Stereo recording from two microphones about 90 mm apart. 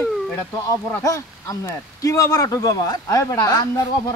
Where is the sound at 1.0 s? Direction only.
40° left (ahead or behind).